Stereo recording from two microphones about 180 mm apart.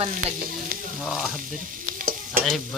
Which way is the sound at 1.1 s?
Centre (ahead or behind).